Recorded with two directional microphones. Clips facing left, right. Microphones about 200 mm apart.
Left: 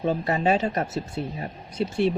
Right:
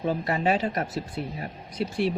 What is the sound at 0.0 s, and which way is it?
Speech, 25° left (ahead or behind).